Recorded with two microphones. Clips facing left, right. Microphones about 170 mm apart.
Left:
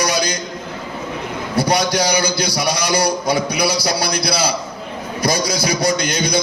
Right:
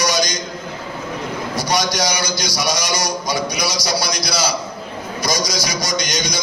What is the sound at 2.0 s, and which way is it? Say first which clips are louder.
A man's voice: left 4 dB; 60° left (ahead or behind).